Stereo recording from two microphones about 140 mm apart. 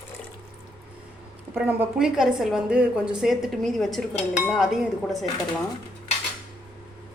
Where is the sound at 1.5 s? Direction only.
10° right (ahead or behind).